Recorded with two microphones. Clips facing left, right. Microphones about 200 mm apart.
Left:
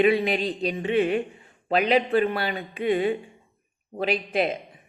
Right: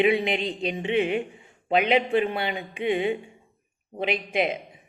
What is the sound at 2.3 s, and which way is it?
Music, 20° right (ahead or behind).